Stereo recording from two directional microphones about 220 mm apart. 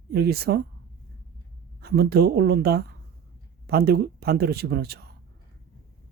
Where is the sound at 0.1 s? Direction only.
45° right (ahead or behind).